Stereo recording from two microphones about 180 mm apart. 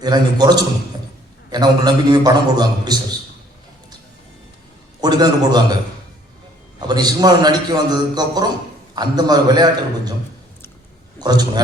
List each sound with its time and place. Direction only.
0.0 s a man's voice: 20° right (ahead or behind)
4.9 s a man's voice: 20° right (ahead or behind)
11.2 s a man's voice: 25° right (ahead or behind)